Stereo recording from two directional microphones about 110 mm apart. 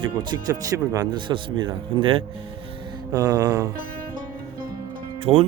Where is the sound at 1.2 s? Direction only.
45° right (ahead or behind).